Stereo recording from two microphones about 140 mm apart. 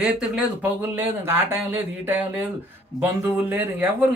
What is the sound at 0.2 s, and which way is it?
Speech, 10° right (ahead or behind).